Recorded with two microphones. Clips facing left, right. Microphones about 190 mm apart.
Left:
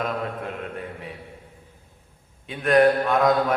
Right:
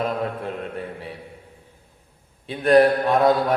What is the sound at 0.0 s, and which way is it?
Mantra, 35° right (ahead or behind).